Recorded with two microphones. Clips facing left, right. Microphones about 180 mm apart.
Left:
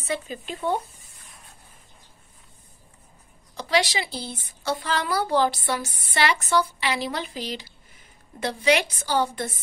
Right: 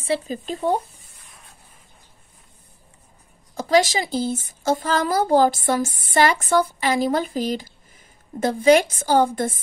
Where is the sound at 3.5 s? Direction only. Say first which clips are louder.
Right 6 dB; 45° right (ahead or behind).